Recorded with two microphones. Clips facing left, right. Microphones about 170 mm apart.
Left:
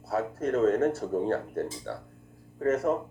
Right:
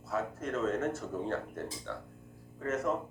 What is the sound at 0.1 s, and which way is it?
Speech, 35° left (ahead or behind).